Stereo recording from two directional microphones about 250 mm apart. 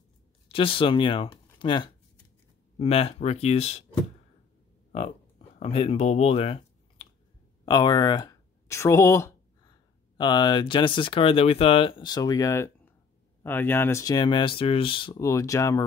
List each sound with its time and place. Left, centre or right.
0.5 s speech: left
5.6 s speech: left